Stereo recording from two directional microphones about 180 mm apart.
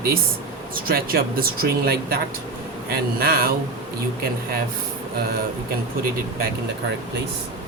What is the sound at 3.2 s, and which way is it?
Speech, 55° right (ahead or behind).